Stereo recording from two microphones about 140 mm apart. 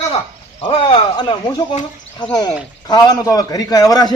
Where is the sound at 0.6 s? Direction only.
40° left (ahead or behind).